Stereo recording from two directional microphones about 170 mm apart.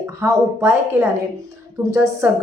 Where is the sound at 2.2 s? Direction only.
10° right (ahead or behind).